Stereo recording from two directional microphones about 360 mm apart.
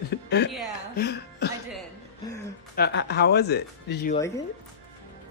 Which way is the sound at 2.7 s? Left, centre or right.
Left.